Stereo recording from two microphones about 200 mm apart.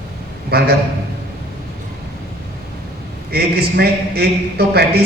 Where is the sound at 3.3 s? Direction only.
50° right (ahead or behind).